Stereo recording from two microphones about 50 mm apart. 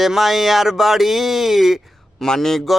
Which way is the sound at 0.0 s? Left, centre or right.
Centre.